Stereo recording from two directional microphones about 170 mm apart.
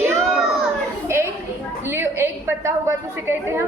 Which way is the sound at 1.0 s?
15° right (ahead or behind).